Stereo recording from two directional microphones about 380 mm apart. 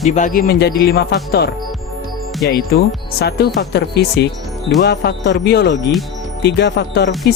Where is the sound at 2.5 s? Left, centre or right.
Left.